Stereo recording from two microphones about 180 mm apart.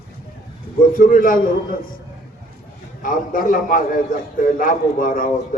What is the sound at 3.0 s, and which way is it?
A man's voice, 50° left (ahead or behind).